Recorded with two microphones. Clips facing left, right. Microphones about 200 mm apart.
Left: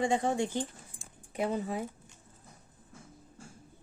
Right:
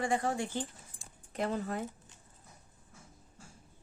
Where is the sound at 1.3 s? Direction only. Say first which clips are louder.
Left 2 dB; 5° left (ahead or behind).